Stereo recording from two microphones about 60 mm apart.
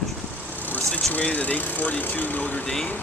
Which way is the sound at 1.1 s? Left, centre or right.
Left.